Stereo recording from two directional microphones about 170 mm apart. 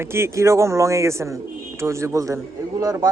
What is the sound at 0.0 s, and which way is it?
A man's voice, 15° right (ahead or behind).